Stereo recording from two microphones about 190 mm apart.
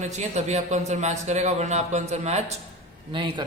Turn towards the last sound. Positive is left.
turn(degrees=-25)  # may be behind; listen again after turning